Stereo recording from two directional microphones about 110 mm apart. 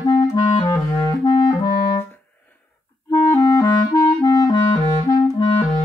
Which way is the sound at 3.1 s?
30° left (ahead or behind).